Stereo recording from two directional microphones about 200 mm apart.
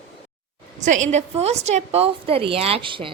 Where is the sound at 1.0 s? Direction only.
35° right (ahead or behind).